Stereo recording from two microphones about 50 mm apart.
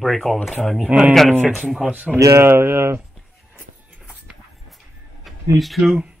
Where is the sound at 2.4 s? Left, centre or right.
Right.